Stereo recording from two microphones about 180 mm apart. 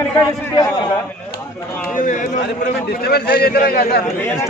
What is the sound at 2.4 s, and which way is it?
A man's voice, 65° left (ahead or behind).